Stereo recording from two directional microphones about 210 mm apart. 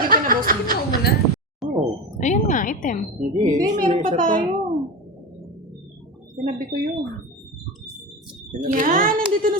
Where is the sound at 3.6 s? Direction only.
40° right (ahead or behind).